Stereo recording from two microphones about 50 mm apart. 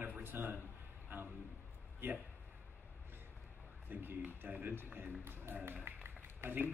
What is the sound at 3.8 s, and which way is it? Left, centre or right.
A man's voice, right.